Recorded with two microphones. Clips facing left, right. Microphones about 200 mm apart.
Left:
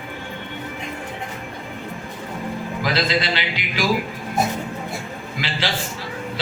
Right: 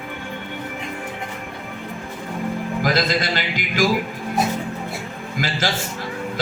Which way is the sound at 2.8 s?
45° right (ahead or behind).